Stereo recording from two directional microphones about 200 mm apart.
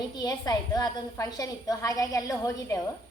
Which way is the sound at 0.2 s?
20° left (ahead or behind).